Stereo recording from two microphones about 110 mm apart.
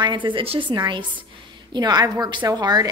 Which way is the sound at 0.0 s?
45° right (ahead or behind).